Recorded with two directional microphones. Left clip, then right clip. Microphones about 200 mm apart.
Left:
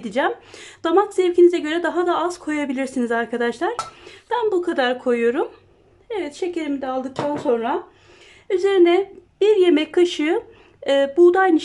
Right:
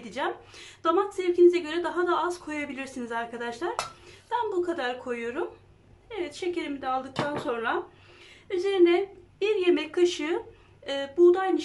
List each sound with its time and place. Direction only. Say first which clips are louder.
0.0 s speech: left 10 dB; 40° left (ahead or behind)